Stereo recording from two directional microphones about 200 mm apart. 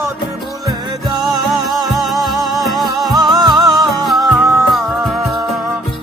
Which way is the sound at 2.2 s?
Centre (ahead or behind).